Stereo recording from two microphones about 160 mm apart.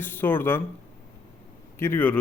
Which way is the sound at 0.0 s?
10° left (ahead or behind).